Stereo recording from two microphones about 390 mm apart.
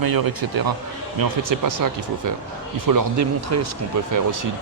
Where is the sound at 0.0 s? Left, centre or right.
Right.